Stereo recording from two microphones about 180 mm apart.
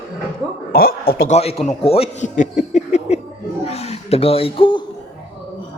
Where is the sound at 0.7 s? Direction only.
55° left (ahead or behind).